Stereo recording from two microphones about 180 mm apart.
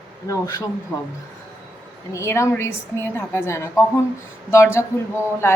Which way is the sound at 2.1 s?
15° left (ahead or behind).